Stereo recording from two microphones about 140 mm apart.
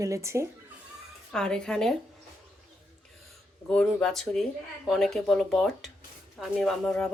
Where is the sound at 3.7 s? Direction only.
5° left (ahead or behind).